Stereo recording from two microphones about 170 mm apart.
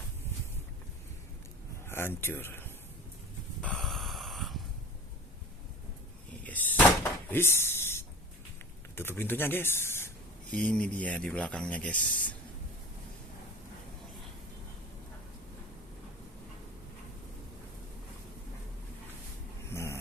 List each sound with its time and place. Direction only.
1.9 s speech: 15° left (ahead or behind)
3.6 s a sound: 5° left (ahead or behind)
6.4 s door: 10° left (ahead or behind)
7.3 s a sound: 15° left (ahead or behind)
9.0 s speech: 15° left (ahead or behind)
19.6 s dog: 15° left (ahead or behind)